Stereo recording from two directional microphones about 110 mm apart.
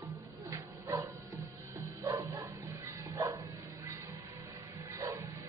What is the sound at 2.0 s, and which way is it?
Bow-wow, 25° right (ahead or behind).